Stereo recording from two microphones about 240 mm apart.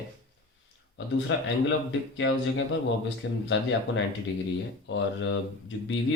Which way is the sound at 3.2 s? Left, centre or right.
Left.